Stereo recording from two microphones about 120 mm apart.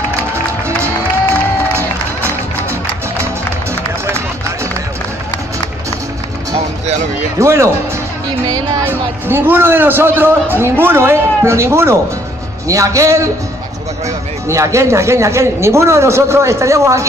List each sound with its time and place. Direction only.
7.3 s a man's voice: 25° right (ahead or behind)
8.8 s a man's voice: 20° right (ahead or behind)
14.5 s a man's voice: 25° right (ahead or behind)